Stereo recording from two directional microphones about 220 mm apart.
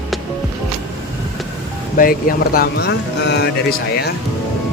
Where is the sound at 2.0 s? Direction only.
40° left (ahead or behind).